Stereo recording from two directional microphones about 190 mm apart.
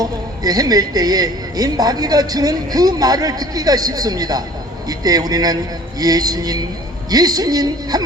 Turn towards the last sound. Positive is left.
turn(degrees=-20)  # may be behind; listen again after turning